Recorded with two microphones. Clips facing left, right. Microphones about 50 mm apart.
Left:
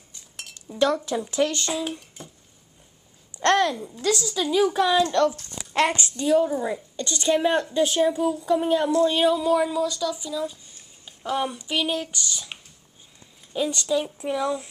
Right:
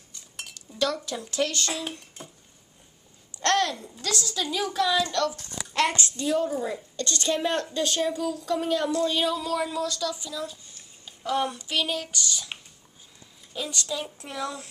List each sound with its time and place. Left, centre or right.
0.6 s speech: left
1.9 s speech: centre
3.3 s a sound: left
4.0 s speech: centre
13.5 s speech: centre